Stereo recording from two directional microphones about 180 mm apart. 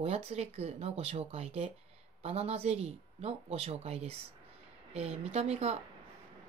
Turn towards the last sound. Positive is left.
turn(degrees=-35)  # may be behind; listen again after turning